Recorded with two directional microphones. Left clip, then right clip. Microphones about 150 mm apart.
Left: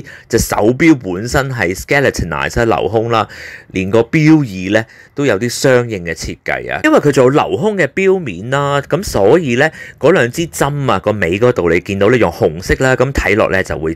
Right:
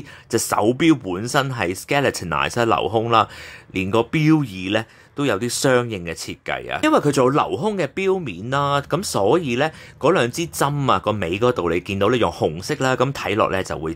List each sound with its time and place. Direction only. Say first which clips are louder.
0.3 s speech: left 6 dB; 20° left (ahead or behind)